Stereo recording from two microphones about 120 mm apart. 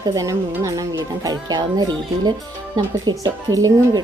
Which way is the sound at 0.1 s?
25° right (ahead or behind).